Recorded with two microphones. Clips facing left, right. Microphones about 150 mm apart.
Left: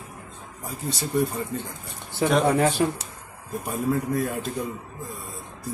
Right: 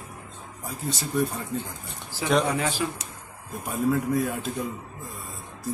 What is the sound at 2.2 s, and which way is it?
Speech, 45° left (ahead or behind).